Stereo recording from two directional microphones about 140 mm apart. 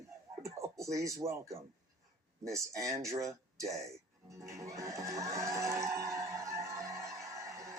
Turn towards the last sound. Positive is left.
turn(degrees=-20)  # may be behind; listen again after turning